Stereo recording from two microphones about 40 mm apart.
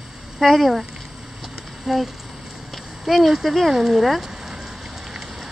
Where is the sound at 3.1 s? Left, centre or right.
Centre.